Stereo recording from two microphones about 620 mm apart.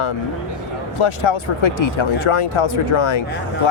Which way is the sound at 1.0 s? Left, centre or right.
Left.